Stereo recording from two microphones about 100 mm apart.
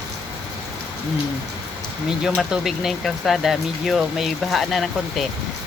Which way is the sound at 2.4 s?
5° right (ahead or behind).